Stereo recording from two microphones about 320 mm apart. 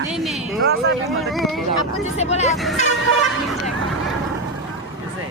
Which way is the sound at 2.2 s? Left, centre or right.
Centre.